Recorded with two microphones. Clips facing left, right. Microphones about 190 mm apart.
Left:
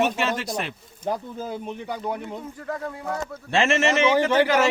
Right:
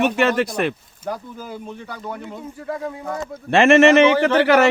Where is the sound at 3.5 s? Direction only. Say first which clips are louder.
Right 9 dB; 60° right (ahead or behind).